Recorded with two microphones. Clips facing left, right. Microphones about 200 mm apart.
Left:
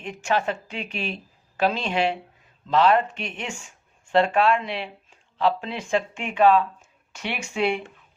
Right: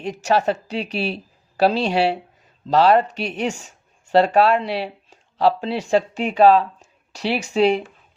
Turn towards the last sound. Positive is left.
turn(degrees=-35)  # may be behind; listen again after turning